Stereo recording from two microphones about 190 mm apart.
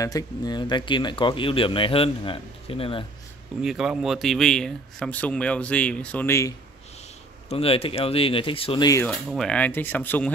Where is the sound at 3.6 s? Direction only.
Centre (ahead or behind); by 6.5 s 15° left (ahead or behind).